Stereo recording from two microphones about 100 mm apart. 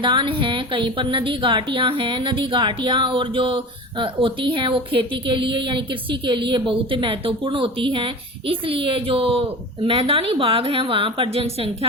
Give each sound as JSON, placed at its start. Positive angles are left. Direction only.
{"t": 0.0, "sound": "speech", "side_deg": -55}